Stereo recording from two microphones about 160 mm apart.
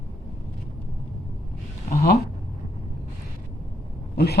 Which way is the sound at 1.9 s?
80° left.